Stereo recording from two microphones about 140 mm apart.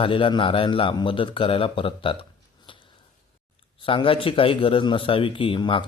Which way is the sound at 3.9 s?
40° left (ahead or behind).